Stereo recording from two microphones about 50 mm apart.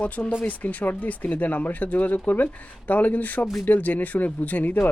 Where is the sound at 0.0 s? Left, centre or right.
Left.